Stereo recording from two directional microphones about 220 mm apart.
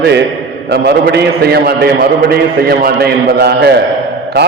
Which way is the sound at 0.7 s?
50° right (ahead or behind).